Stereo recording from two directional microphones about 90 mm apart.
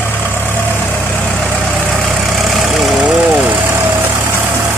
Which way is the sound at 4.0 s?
25° right (ahead or behind).